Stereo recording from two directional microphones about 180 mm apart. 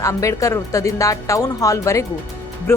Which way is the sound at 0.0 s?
15° left (ahead or behind).